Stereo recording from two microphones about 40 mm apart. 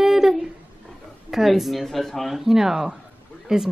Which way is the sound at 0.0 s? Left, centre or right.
Centre.